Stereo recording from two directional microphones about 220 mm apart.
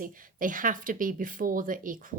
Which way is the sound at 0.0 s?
40° right (ahead or behind).